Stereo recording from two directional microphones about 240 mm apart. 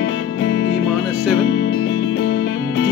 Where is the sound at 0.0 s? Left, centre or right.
Left.